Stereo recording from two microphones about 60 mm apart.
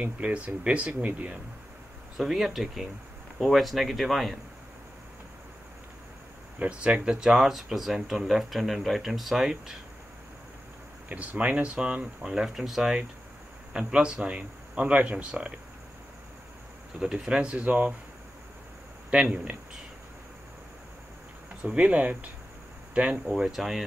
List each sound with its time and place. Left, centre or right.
0.0 s speech: right
2.1 s speech: centre
6.8 s speech: centre
11.1 s speech: right
17.0 s speech: centre
19.2 s speech: right
21.6 s speech: right
23.3 s speech: centre